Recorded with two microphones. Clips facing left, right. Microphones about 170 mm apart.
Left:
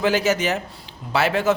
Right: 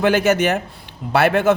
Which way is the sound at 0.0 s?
55° right (ahead or behind).